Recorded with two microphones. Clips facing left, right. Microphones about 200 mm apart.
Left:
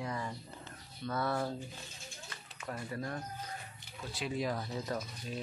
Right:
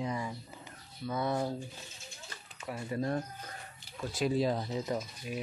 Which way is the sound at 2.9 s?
25° right (ahead or behind).